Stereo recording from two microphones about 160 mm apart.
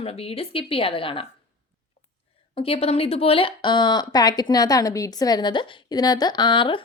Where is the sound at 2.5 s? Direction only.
35° left (ahead or behind).